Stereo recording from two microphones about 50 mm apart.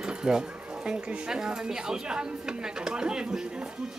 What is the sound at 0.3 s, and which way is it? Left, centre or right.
Speech, centre.